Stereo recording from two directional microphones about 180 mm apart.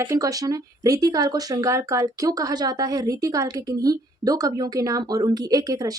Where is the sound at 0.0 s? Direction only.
20° right (ahead or behind).